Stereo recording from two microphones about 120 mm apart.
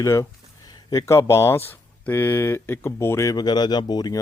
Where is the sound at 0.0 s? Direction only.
25° left (ahead or behind).